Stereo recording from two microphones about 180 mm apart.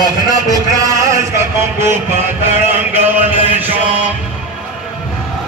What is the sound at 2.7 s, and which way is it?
Mantra, 10° right (ahead or behind).